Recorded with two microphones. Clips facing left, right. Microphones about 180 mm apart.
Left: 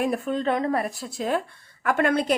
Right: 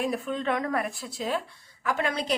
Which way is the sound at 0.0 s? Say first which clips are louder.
Left 4 dB; 45° left (ahead or behind).